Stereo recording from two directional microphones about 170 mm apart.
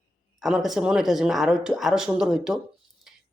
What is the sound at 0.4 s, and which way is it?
Speech, centre (ahead or behind).